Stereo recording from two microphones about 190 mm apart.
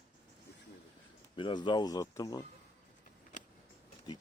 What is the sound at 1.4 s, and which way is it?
Speech, 25° left (ahead or behind).